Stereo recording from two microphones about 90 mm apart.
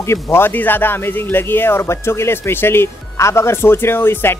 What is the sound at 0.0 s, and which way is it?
Speech, 30° left (ahead or behind).